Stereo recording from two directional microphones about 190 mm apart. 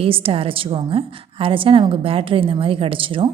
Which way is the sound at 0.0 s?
30° right (ahead or behind).